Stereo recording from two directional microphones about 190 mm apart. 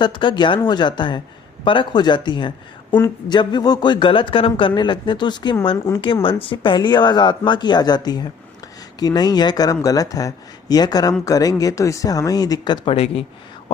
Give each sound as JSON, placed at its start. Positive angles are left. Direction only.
{"t": 0.0, "sound": "speech", "side_deg": 25}
{"t": 6.2, "sound": "speech", "side_deg": 25}